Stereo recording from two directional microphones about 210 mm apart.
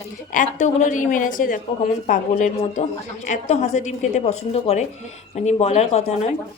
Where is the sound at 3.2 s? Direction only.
35° left (ahead or behind).